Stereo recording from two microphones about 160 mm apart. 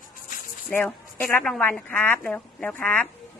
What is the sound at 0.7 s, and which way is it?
Speech, 10° left (ahead or behind).